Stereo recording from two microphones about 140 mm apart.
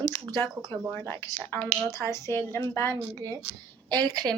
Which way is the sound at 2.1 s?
20° left (ahead or behind).